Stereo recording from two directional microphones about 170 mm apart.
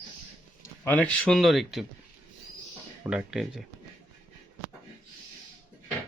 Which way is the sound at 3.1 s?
5° right (ahead or behind).